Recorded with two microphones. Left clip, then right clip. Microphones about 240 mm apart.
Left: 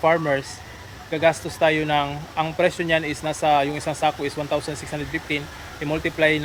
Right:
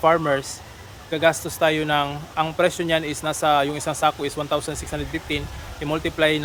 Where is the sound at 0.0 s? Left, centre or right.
Centre.